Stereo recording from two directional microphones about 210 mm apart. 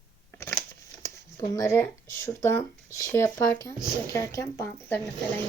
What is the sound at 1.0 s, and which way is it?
Speech, 15° left (ahead or behind).